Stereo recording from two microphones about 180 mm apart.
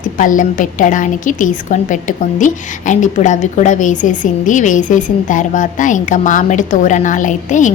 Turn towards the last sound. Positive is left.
turn(degrees=45)  # may be behind; listen again after turning